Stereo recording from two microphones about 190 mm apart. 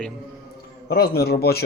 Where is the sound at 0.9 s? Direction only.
55° left (ahead or behind).